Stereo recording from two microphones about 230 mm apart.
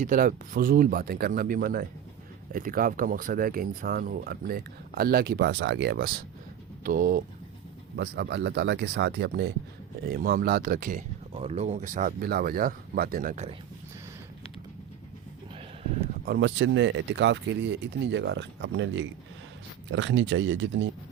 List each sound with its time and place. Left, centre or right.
0.0 s speech: right
16.2 s speech: right